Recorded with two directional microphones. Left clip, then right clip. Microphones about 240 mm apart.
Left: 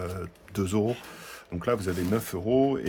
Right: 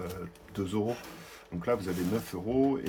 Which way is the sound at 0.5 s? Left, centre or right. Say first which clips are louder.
Left 4 dB; left.